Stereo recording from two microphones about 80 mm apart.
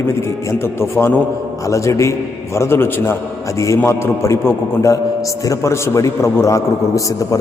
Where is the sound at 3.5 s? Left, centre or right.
Left.